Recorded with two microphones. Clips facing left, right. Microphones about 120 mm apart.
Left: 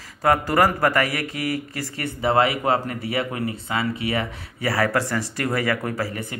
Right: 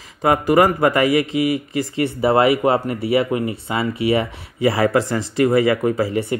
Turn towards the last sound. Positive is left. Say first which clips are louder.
# right 8 dB
turn(degrees=-25)  # may be behind; listen again after turning